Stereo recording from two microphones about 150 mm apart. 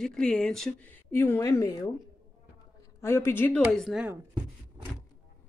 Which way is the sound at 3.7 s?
Centre (ahead or behind).